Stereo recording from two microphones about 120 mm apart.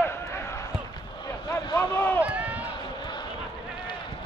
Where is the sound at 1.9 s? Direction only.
20° left (ahead or behind).